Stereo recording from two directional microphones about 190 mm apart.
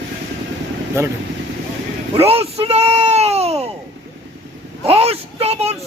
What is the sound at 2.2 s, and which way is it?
Speech, 30° right (ahead or behind).